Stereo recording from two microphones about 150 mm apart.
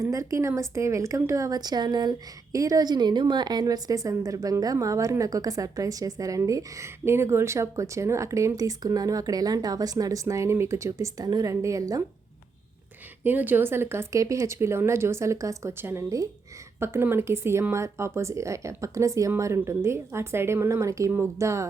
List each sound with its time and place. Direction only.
0.0 s a woman's voice: 20° right (ahead or behind)
13.2 s a woman's voice: 10° right (ahead or behind)